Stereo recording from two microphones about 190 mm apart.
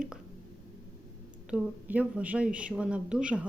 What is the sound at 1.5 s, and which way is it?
Speech, 5° right (ahead or behind).